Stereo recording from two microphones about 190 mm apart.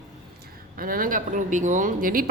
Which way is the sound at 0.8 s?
50° right (ahead or behind).